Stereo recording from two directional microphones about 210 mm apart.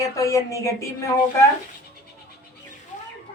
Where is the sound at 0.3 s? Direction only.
15° left (ahead or behind).